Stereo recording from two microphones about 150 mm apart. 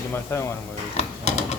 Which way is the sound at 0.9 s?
50° left (ahead or behind).